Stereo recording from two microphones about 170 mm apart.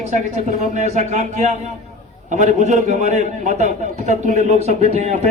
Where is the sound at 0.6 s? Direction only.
45° right (ahead or behind).